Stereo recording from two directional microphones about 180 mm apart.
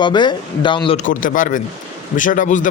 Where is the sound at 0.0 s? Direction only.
25° left (ahead or behind).